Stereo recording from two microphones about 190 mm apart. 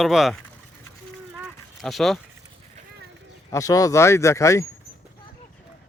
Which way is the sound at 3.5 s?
15° left (ahead or behind).